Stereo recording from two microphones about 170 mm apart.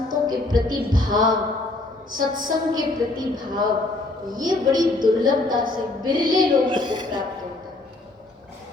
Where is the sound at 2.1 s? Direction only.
55° right (ahead or behind).